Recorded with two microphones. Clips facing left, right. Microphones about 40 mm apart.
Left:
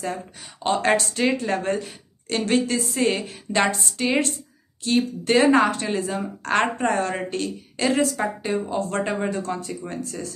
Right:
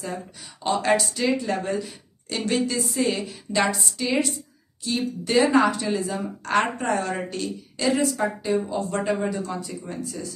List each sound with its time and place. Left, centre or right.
0.7 s a woman's voice: left
9.0 s speech: left
9.3 s speech: left